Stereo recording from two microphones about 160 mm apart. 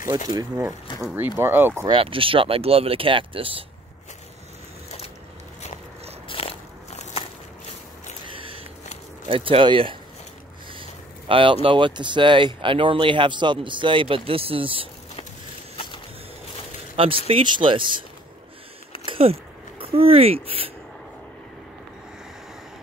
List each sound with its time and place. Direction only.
0.3 s speech: 25° right (ahead or behind)
1.1 s speech: 15° right (ahead or behind)
1.9 s speech: 35° right (ahead or behind)
6.2 s biting: 35° left (ahead or behind)
8.4 s a sound: 35° right (ahead or behind)
9.3 s speech: 35° right (ahead or behind)
16.9 s speech: 35° right (ahead or behind)
19.0 s speech: 35° right (ahead or behind)